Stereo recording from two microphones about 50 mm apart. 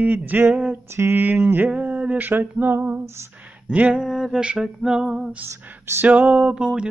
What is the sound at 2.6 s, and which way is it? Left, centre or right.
Mantra, right.